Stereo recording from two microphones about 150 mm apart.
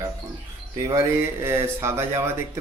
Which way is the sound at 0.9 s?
15° right (ahead or behind).